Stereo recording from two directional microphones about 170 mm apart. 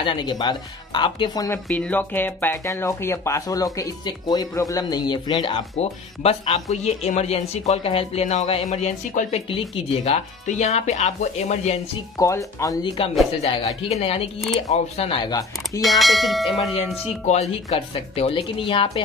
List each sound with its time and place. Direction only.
0.0 s speech: 25° left (ahead or behind)
1.7 s speech: 5° left (ahead or behind); by 11.7 s 40° left (ahead or behind)
12.2 s speech: 20° left (ahead or behind)
13.0 s speech: 35° left (ahead or behind)
15.8 s speech: centre (ahead or behind)
17.3 s speech: 40° left (ahead or behind)